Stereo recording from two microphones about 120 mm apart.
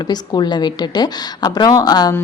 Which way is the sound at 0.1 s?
40° left (ahead or behind).